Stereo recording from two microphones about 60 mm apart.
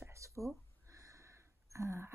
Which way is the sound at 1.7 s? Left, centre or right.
Right.